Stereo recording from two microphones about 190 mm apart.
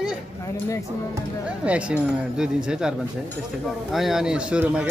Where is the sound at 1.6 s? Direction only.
5° right (ahead or behind).